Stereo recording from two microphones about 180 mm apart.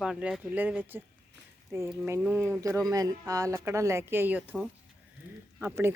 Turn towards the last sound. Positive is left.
turn(degrees=-10)  # may be behind; listen again after turning